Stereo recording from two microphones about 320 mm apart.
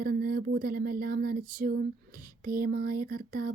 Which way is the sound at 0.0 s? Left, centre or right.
Right.